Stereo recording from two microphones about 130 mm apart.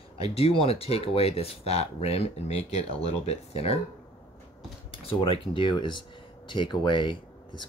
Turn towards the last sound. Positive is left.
turn(degrees=40)  # may be behind; listen again after turning